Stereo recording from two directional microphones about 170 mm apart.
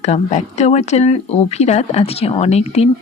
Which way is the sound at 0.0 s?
40° left (ahead or behind).